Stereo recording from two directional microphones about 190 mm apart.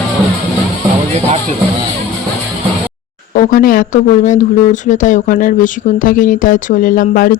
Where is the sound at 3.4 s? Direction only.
45° left (ahead or behind).